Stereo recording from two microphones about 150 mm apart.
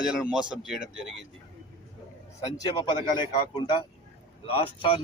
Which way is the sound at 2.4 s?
25° left (ahead or behind).